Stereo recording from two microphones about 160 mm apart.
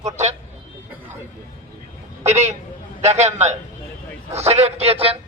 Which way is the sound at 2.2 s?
45° right (ahead or behind).